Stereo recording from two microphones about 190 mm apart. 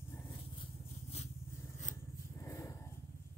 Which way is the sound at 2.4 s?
15° left (ahead or behind).